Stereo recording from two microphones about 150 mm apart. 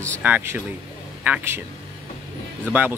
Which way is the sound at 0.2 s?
10° right (ahead or behind).